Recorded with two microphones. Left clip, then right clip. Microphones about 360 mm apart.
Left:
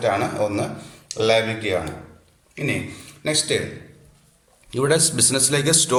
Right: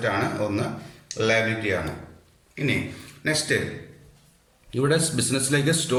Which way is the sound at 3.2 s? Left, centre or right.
Centre.